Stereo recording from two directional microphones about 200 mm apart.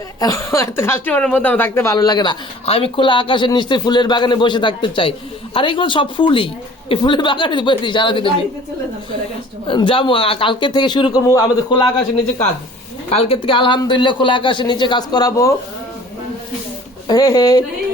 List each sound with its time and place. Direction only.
0.2 s speech: 15° left (ahead or behind)
9.6 s speech: 25° left (ahead or behind)
13.1 s speech: 30° left (ahead or behind)
17.1 s speech: 20° left (ahead or behind)